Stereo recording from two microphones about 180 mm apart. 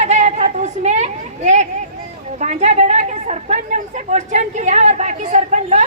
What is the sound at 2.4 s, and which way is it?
A woman's voice, 40° right (ahead or behind).